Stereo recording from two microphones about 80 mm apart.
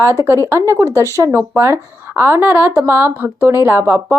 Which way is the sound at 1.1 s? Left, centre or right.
Right.